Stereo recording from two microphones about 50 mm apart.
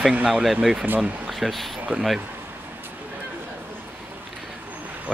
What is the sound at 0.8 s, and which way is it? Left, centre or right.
Speech, right.